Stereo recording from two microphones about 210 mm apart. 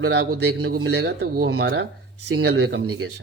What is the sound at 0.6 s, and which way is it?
A man's voice, 50° right (ahead or behind).